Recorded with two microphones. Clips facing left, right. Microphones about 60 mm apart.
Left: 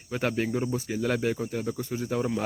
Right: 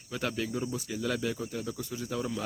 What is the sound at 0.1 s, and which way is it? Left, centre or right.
Speech, left.